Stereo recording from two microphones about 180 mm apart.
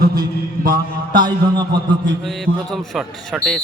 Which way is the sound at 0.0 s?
55° right (ahead or behind).